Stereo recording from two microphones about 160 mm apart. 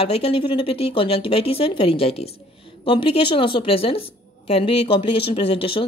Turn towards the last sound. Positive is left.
turn(degrees=35)  # may be behind; listen again after turning